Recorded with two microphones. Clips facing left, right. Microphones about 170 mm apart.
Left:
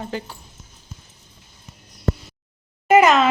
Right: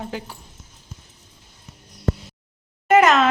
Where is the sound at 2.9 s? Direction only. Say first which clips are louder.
Left 1 dB; centre (ahead or behind).